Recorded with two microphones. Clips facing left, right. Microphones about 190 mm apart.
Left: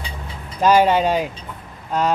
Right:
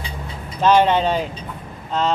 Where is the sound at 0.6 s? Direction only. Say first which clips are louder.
Even; 10° left (ahead or behind).